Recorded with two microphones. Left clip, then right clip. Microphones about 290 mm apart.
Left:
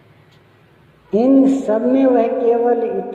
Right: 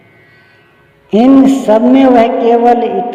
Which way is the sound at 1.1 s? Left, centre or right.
Right.